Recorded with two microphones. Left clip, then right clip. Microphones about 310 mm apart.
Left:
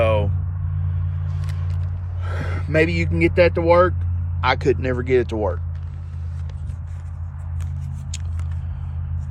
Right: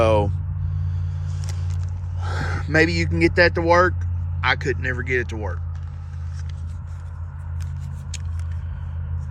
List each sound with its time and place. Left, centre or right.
0.0 s a sound: centre
1.3 s biting: right
2.2 s speech: centre